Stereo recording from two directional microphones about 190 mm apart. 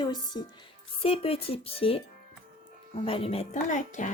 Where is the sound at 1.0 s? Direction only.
30° left (ahead or behind).